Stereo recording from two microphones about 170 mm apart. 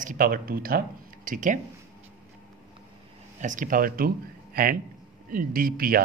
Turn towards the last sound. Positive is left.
turn(degrees=-60)  # may be behind; listen again after turning